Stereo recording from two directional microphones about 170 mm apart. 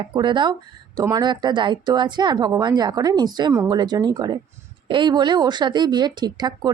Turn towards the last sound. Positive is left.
turn(degrees=-25)  # may be behind; listen again after turning